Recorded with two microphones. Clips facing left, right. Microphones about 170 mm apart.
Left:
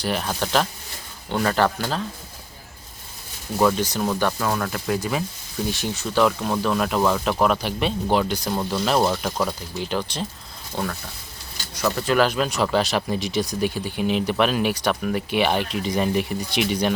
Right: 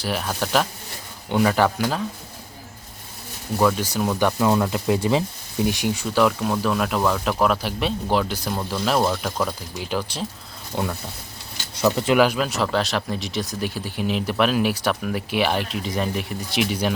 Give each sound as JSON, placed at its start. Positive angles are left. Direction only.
{"t": 0.0, "sound": "speech", "side_deg": -5}
{"t": 3.6, "sound": "speech", "side_deg": 5}